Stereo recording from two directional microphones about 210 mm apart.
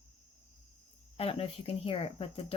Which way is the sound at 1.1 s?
25° left (ahead or behind).